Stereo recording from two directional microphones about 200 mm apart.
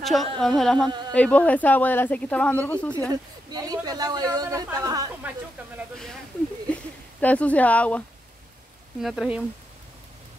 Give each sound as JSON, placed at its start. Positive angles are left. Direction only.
{"t": 0.0, "sound": "a woman's voice", "side_deg": 0}
{"t": 0.4, "sound": "a sound", "side_deg": 0}
{"t": 1.1, "sound": "speech", "side_deg": 5}
{"t": 3.1, "sound": "a woman's voice", "side_deg": -20}
{"t": 6.7, "sound": "speech", "side_deg": 5}
{"t": 9.0, "sound": "a sound", "side_deg": 0}